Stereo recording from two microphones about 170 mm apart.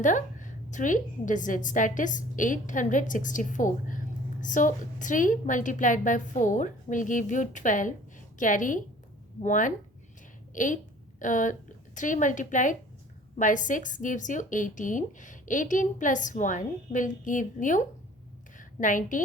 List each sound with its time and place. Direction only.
0.0 s a woman's voice: 50° left (ahead or behind)